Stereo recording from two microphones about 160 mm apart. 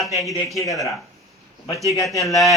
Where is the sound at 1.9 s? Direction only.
20° left (ahead or behind).